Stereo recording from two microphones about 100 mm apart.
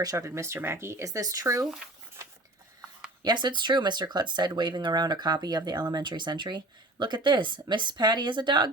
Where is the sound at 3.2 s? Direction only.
50° right (ahead or behind).